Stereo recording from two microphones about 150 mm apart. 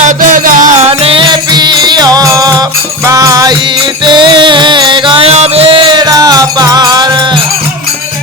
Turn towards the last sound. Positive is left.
turn(degrees=-30)  # may be behind; listen again after turning